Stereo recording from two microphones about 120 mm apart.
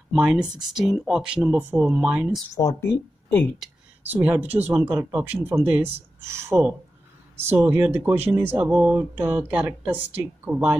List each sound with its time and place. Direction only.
0.1 s speech: 5° right (ahead or behind)
2.5 s speech: 25° left (ahead or behind)
4.1 s speech: 15° right (ahead or behind)